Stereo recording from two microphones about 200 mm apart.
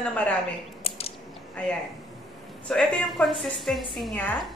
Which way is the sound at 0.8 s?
30° left (ahead or behind).